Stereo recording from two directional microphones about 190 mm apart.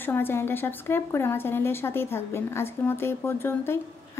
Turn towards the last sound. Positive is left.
turn(degrees=10)  # may be behind; listen again after turning